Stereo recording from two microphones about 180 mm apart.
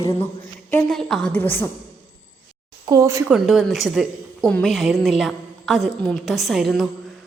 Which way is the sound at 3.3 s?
5° right (ahead or behind).